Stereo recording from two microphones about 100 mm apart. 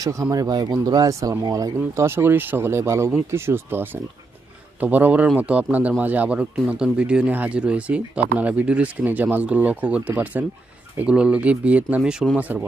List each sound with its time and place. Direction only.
0.0 s speech: 35° right (ahead or behind); by 12.6 s 15° right (ahead or behind)